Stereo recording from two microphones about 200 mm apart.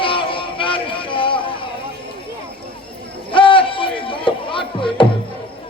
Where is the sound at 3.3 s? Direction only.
25° left (ahead or behind).